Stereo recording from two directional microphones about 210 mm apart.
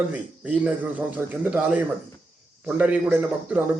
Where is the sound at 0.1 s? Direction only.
5° right (ahead or behind).